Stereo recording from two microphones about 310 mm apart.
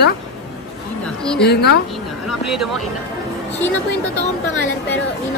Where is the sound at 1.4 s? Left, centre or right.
Left.